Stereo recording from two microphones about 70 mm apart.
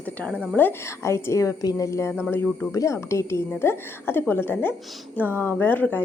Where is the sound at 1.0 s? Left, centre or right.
Left.